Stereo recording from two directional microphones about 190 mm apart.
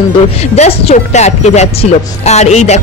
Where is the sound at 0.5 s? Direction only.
35° left (ahead or behind).